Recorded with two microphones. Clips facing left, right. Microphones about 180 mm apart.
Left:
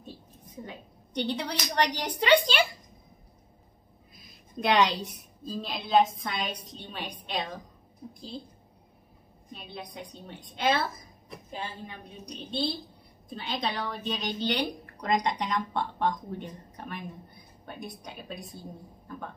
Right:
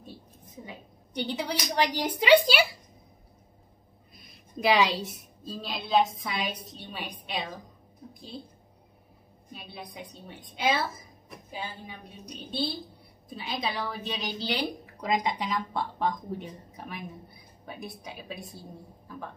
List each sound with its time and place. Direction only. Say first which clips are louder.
0.7 s speech: left 1 dB; 10° right (ahead or behind)
4.1 s a woman's voice: right 2 dB; centre (ahead or behind)
9.5 s a woman's voice: left 1 dB; 5° right (ahead or behind)